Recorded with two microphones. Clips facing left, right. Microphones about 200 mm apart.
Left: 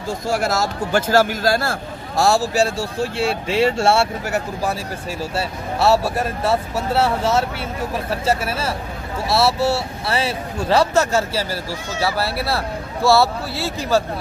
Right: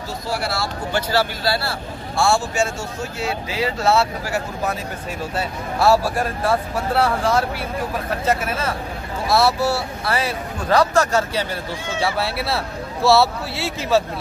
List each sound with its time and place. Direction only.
0.3 s speech: 45° left (ahead or behind); by 4.1 s 30° left (ahead or behind)
5.3 s speech: 25° left (ahead or behind)
12.0 s a man's voice: centre (ahead or behind)